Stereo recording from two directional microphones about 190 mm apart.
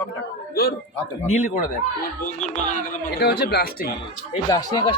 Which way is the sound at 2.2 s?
40° left (ahead or behind).